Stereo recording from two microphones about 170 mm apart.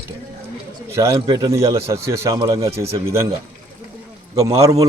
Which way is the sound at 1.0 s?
20° right (ahead or behind).